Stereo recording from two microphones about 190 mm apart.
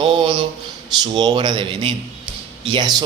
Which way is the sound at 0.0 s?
25° right (ahead or behind).